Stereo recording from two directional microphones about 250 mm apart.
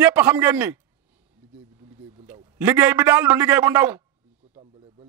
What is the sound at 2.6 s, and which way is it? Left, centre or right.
A man's voice, centre.